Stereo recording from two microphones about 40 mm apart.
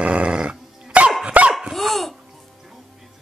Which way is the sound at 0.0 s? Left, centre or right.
Right.